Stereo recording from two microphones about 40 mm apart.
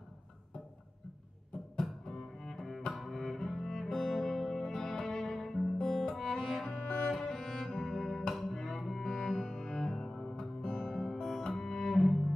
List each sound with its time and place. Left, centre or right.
1.8 s double bass: centre
3.3 s music: centre
5.8 s music: left
6.2 s cello: centre
7.2 s music: centre
8.5 s cello: centre